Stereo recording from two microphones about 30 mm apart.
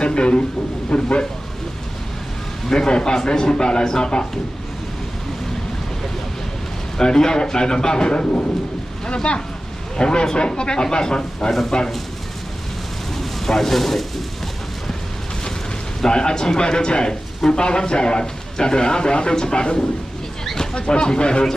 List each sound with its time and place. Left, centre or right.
0.0 s speech: left
2.7 s a man's voice: left
7.0 s a man's voice: left
13.5 s speech: centre
16.1 s a man's voice: left